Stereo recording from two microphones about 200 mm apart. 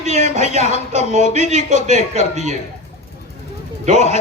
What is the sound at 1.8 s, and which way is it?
Speech, 35° right (ahead or behind).